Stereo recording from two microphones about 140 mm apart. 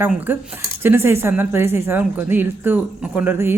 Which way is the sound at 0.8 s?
15° right (ahead or behind).